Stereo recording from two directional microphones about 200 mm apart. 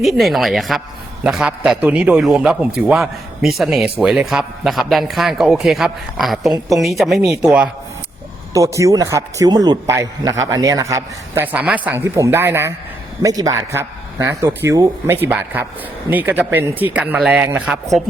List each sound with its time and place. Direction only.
0.0 s a man's voice: centre (ahead or behind)
8.5 s speech: 15° right (ahead or behind)